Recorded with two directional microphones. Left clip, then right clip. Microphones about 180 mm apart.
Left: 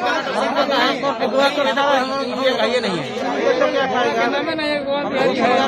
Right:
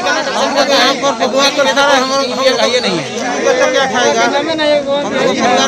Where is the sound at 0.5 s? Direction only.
Centre (ahead or behind).